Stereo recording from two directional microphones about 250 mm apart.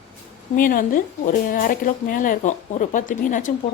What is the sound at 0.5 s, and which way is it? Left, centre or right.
Speech, left.